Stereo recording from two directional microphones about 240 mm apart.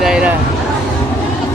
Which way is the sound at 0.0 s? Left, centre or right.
Centre.